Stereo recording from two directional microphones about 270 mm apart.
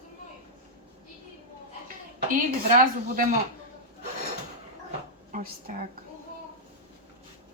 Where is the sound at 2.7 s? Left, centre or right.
Right.